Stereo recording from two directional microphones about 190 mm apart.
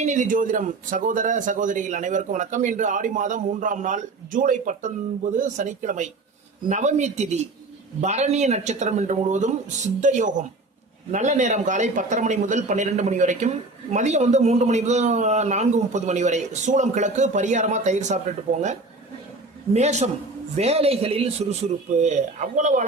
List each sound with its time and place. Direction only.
0.0 s a man's voice: 40° right (ahead or behind)